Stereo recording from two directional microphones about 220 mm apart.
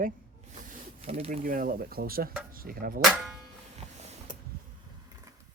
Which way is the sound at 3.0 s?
Centre (ahead or behind).